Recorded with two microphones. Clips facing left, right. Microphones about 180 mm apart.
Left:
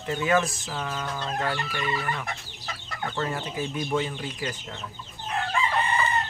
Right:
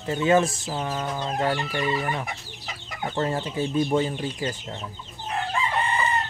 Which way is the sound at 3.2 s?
30° right (ahead or behind).